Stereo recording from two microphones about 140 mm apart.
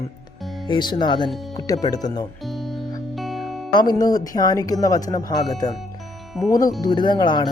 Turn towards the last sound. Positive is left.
turn(degrees=35)  # may be behind; listen again after turning